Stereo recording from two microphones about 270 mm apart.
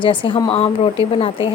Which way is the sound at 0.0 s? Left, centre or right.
Centre.